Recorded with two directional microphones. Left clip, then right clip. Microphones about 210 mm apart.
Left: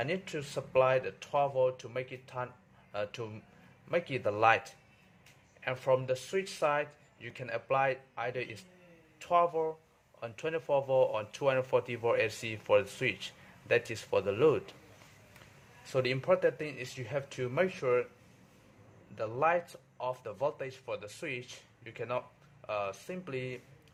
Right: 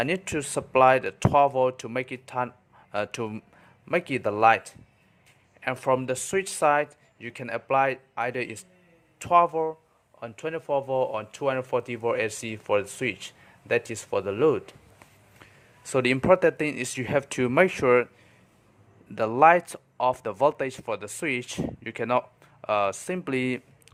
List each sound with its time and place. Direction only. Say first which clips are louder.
0.0 s speech: right 8 dB; 35° right (ahead or behind)
15.8 s speech: right 8 dB; 35° right (ahead or behind)
19.1 s speech: right 12 dB; 35° right (ahead or behind)